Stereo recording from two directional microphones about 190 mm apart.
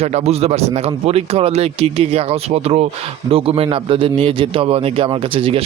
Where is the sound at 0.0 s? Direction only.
35° right (ahead or behind).